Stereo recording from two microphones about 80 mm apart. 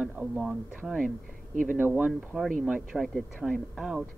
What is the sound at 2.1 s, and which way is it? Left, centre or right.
Speech, centre.